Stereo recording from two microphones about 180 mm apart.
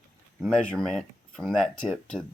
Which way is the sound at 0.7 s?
Centre (ahead or behind).